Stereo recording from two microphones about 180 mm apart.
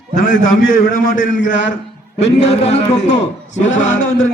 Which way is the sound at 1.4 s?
85° left.